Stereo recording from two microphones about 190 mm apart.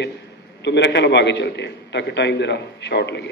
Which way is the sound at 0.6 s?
65° left (ahead or behind).